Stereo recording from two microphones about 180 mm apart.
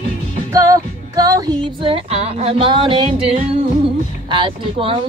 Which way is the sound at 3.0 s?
35° right (ahead or behind).